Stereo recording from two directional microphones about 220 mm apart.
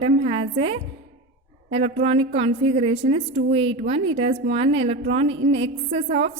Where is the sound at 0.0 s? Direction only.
25° right (ahead or behind).